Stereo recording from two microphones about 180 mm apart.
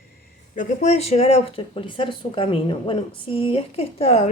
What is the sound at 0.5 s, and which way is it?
A woman's voice, 40° left (ahead or behind).